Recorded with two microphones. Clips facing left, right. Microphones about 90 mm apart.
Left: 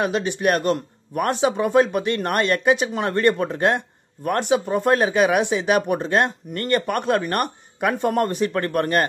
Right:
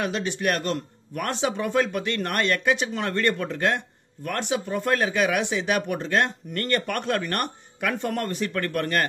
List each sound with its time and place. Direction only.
0.0 s speech: 20° left (ahead or behind)
4.2 s speech: 40° left (ahead or behind)
4.5 s speech: 25° left (ahead or behind)